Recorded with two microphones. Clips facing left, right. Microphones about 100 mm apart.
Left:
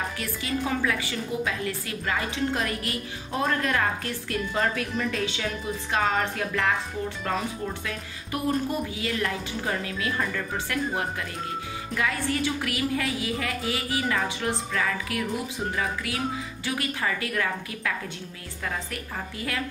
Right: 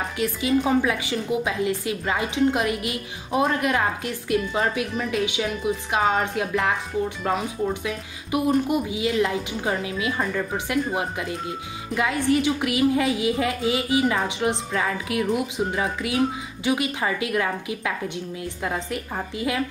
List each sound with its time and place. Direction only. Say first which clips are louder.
0.2 s a woman's voice: right 12 dB; 20° right (ahead or behind)